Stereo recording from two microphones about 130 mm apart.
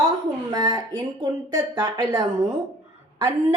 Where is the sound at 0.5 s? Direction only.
30° right (ahead or behind).